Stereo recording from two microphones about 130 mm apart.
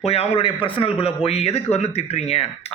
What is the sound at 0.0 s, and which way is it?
Speech, 50° left (ahead or behind).